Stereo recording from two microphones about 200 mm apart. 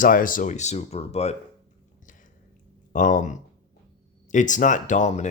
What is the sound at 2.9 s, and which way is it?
Speech, 40° left (ahead or behind).